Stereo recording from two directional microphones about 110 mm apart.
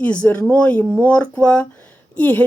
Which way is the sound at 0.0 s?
10° left (ahead or behind).